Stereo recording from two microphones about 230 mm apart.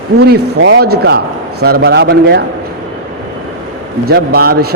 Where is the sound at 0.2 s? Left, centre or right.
Right.